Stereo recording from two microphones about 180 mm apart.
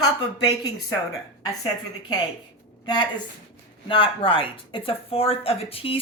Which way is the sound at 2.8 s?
25° left (ahead or behind).